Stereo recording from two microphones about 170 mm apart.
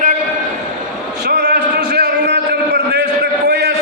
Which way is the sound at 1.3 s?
70° right (ahead or behind).